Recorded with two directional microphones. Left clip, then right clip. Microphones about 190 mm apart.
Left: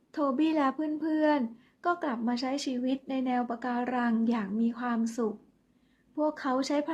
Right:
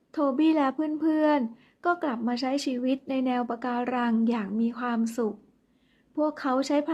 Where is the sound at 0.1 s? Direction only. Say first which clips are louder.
Right 4 dB; 20° right (ahead or behind).